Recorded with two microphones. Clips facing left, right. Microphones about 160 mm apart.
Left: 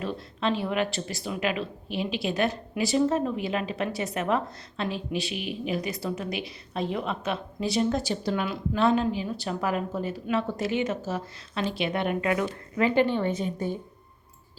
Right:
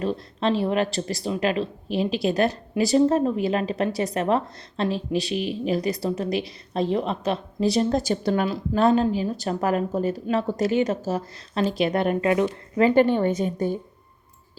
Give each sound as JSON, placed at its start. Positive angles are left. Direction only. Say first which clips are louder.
{"t": 0.0, "sound": "a woman's voice", "louder": "right 5 dB", "side_deg": -35}
{"t": 8.4, "sound": "a woman's voice", "louder": "right 3 dB", "side_deg": -40}